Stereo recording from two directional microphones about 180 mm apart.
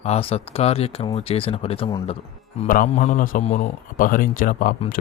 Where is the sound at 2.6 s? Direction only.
50° left (ahead or behind).